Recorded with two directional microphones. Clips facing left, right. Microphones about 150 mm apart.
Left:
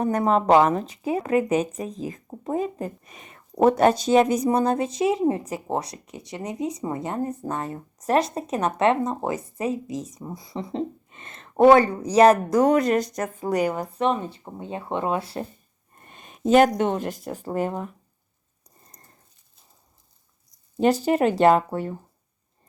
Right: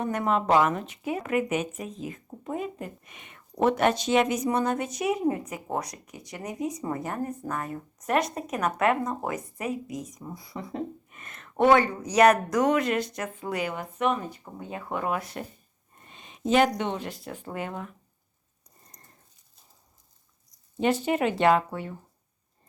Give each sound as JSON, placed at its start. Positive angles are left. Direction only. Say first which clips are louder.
{"t": 0.0, "sound": "a woman's voice", "louder": "left 5 dB", "side_deg": 40}
{"t": 16.0, "sound": "speech", "louder": "left 3 dB", "side_deg": 50}
{"t": 18.9, "sound": "dog", "louder": "left 1 dB", "side_deg": 50}
{"t": 20.7, "sound": "a woman's voice", "louder": "left 5 dB", "side_deg": 40}